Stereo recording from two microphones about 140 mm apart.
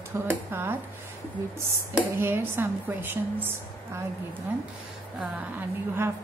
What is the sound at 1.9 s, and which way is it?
Speech, 15° right (ahead or behind).